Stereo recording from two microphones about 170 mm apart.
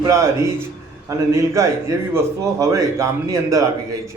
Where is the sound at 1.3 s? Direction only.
15° right (ahead or behind).